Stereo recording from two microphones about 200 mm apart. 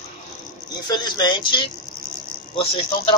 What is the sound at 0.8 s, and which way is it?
A man's voice, 20° left (ahead or behind).